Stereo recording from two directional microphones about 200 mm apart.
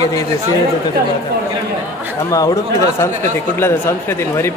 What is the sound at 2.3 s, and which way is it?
Speech, 15° left (ahead or behind).